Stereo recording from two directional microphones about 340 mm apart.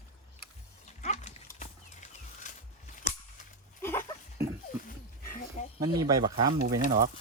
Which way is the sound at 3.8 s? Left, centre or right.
Centre.